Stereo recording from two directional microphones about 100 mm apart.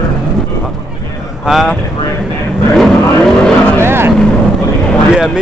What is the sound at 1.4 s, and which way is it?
Speech, centre (ahead or behind).